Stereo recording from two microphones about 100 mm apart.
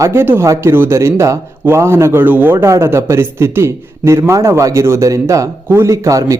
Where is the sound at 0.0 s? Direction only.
25° right (ahead or behind).